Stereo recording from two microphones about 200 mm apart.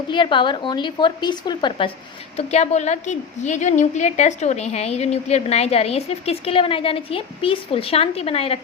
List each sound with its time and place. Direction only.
0.1 s speech: 25° left (ahead or behind)
2.3 s a woman's voice: 35° left (ahead or behind)